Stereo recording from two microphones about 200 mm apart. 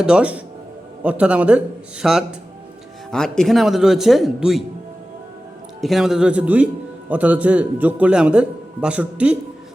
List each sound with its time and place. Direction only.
0.0 s speech: 5° right (ahead or behind)
5.8 s a man's voice: centre (ahead or behind)